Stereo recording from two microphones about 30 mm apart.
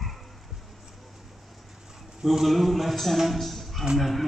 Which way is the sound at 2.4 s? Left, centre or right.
Centre.